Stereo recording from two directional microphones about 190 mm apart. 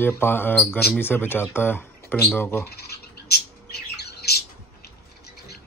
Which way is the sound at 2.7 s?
55° left (ahead or behind).